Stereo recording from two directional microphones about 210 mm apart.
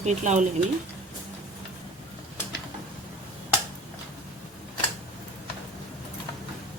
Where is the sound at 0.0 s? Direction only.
35° right (ahead or behind).